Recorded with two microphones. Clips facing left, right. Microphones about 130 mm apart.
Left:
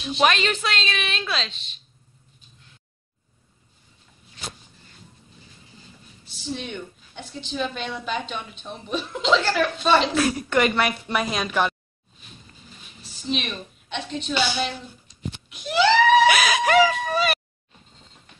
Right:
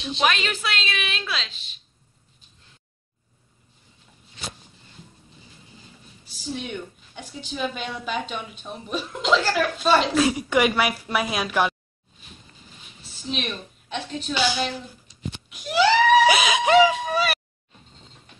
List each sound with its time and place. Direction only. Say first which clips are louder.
0.2 s a woman's voice: left 3 dB; 5° right (ahead or behind)
6.3 s a woman's voice: even; 5° right (ahead or behind)
13.0 s a woman's voice: left 2 dB; centre (ahead or behind)
15.5 s a sound: even; 5° right (ahead or behind)
16.3 s laughter: even; 20° right (ahead or behind)
17.1 s a sound: left 1 dB; 5° right (ahead or behind)